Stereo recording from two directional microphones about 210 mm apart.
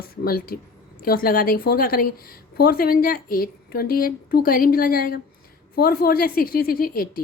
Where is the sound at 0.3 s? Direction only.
45° left (ahead or behind).